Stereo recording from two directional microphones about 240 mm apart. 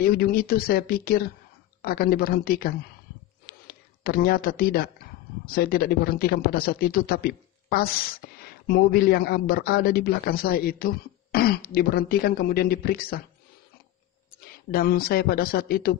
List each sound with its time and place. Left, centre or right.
0.0 s speech: left
3.4 s a sound: left
5.4 s speech: left
14.7 s speech: left